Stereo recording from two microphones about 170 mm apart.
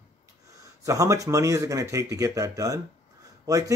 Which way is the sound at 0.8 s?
20° right (ahead or behind).